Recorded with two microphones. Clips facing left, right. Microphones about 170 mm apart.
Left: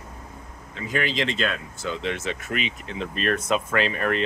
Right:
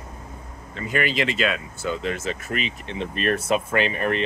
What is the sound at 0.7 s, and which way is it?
Speech, centre (ahead or behind).